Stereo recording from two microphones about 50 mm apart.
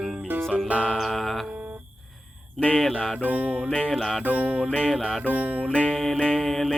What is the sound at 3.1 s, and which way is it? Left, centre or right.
Music, right.